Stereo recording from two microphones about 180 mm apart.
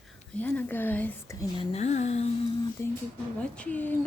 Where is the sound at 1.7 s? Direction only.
40° left (ahead or behind).